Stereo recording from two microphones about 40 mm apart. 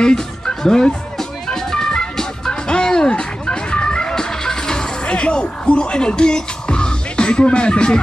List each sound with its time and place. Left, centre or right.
0.0 s music: centre